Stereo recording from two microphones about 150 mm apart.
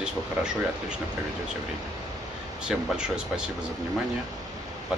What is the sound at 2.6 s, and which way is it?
Speech, 5° right (ahead or behind).